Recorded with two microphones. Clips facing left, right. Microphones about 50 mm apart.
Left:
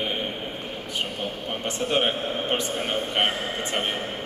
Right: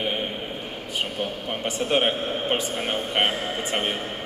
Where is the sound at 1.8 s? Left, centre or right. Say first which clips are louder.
Right 1 dB; right.